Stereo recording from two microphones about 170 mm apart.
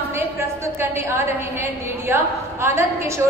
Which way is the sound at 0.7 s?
15° right (ahead or behind).